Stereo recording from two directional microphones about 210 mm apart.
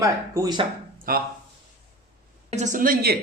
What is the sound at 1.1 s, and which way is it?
Speech, 45° right (ahead or behind).